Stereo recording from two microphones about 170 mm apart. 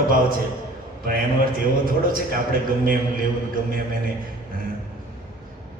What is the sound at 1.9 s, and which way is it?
A man's voice, 55° right (ahead or behind).